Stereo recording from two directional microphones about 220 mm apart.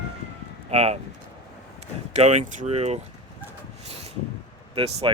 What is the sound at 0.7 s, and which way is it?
Speech, 30° right (ahead or behind).